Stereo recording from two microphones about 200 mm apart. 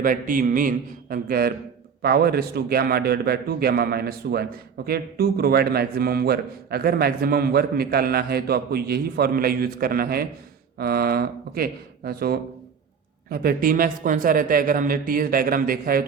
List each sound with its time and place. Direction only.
0.0 s a man's voice: 45° right (ahead or behind)